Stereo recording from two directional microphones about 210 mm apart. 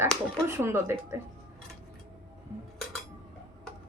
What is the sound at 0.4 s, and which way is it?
Speech, 10° right (ahead or behind).